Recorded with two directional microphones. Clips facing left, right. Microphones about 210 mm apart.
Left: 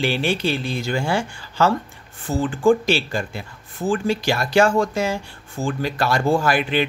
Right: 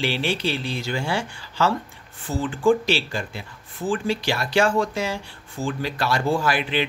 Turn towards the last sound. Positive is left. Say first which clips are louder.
# left 3 dB
turn(degrees=45)  # may be behind; listen again after turning